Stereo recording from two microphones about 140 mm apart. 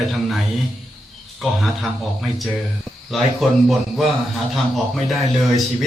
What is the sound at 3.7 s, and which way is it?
Speech, centre (ahead or behind).